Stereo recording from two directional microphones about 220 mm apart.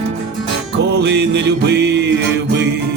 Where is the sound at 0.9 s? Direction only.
50° right (ahead or behind).